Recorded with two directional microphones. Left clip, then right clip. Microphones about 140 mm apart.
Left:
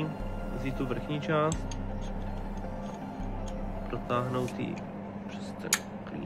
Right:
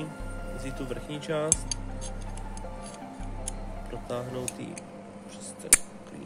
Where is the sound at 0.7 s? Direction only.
45° right (ahead or behind).